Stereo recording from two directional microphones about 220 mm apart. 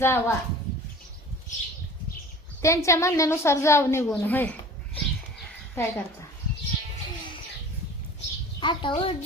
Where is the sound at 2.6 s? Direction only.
15° left (ahead or behind).